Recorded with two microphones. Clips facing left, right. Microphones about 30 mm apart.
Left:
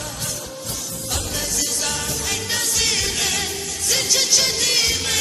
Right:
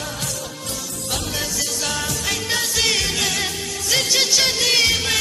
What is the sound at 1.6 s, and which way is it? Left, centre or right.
Music, centre.